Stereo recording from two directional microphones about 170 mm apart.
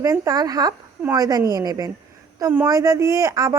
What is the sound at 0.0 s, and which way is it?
Speech, 20° right (ahead or behind).